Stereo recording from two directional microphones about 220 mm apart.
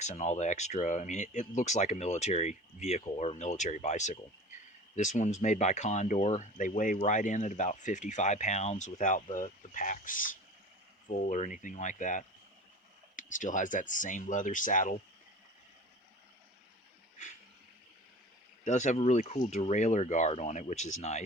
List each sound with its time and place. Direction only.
0.0 s speech: 30° left (ahead or behind)
18.6 s speech: 35° left (ahead or behind)